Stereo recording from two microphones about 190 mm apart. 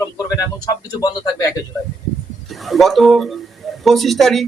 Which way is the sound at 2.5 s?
Centre (ahead or behind).